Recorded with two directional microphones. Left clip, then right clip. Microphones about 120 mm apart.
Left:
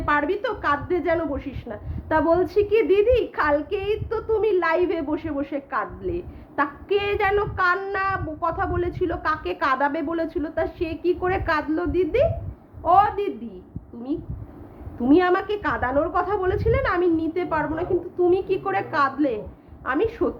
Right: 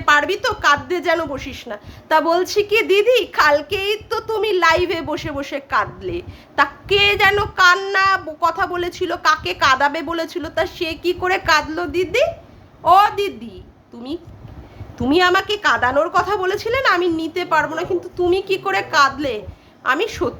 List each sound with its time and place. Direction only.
0.0 s a woman's voice: 25° right (ahead or behind)
15.0 s a woman's voice: 30° right (ahead or behind)